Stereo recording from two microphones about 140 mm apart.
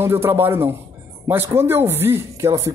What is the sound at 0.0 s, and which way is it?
A man's voice, 15° right (ahead or behind).